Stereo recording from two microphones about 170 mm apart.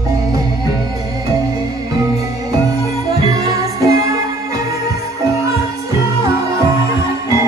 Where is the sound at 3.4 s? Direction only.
20° right (ahead or behind).